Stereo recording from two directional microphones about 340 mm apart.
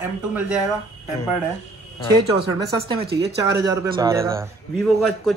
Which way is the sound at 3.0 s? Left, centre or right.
Right.